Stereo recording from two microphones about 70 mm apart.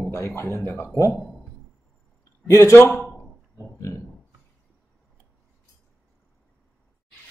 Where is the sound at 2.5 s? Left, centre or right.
Left.